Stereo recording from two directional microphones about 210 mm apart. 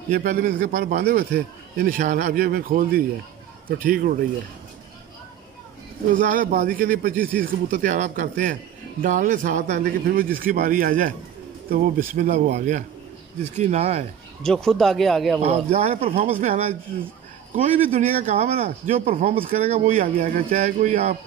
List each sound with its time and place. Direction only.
0.1 s a man's voice: 35° right (ahead or behind)
6.1 s a man's voice: 40° right (ahead or behind)
14.4 s speech: 5° left (ahead or behind)
15.4 s a man's voice: 30° right (ahead or behind)